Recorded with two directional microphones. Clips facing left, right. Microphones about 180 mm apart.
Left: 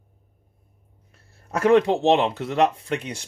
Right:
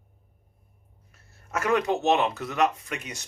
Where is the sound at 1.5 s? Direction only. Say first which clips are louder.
Left 7 dB; 30° left (ahead or behind).